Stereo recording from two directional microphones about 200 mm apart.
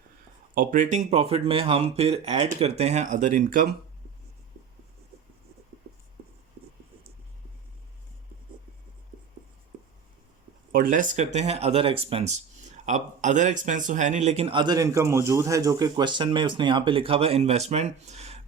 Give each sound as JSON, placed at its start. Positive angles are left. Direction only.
{"t": 0.5, "sound": "speech", "side_deg": -45}
{"t": 10.7, "sound": "speech", "side_deg": -45}